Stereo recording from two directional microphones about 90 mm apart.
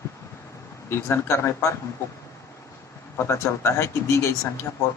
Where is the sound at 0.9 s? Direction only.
30° left (ahead or behind).